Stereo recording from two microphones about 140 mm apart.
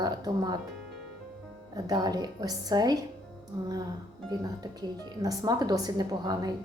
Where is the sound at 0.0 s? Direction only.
30° right (ahead or behind).